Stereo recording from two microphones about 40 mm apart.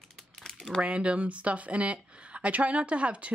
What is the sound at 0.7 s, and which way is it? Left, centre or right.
Speech, right.